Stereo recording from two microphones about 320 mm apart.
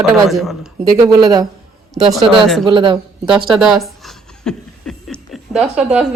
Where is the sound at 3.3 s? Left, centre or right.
Centre.